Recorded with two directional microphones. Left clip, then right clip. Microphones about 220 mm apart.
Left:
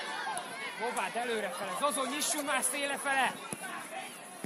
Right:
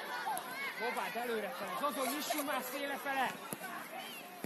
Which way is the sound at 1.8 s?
40° left (ahead or behind).